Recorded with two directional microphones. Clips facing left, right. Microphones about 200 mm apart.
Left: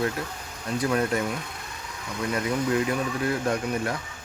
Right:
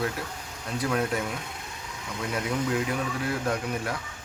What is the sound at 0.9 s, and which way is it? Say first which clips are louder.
Speech: left 2 dB; centre (ahead or behind).